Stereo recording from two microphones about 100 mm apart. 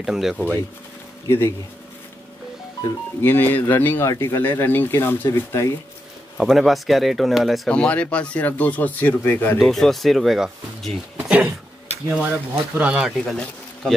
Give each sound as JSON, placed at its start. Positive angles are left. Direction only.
{"t": 0.0, "sound": "speech", "side_deg": -5}
{"t": 1.2, "sound": "a man's voice", "side_deg": 25}
{"t": 3.2, "sound": "speech", "side_deg": 20}
{"t": 4.1, "sound": "speech", "side_deg": 35}
{"t": 4.4, "sound": "speech", "side_deg": 20}
{"t": 6.3, "sound": "speech", "side_deg": 0}
{"t": 7.7, "sound": "speech", "side_deg": 10}
{"t": 9.6, "sound": "speech", "side_deg": 5}
{"t": 11.2, "sound": "a sound", "side_deg": -15}
{"t": 12.1, "sound": "speech", "side_deg": -15}
{"t": 13.2, "sound": "speech", "side_deg": 5}